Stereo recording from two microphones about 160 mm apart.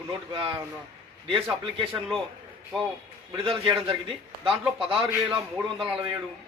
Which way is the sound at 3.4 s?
30° right (ahead or behind).